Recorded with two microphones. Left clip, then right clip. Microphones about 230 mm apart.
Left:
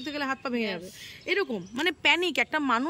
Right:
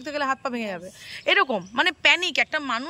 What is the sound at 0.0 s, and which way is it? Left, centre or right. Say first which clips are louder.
Speech: right 5 dB; centre.